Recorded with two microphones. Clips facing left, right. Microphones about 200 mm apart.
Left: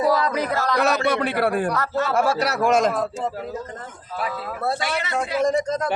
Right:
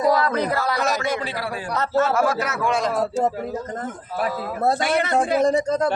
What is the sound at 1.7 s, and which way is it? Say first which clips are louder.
Speech: right 1 dB; 20° right (ahead or behind).